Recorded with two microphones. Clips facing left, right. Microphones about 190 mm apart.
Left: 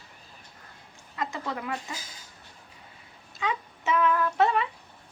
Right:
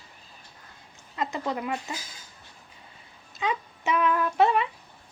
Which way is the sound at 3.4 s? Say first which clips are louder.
Right 2 dB; 20° right (ahead or behind).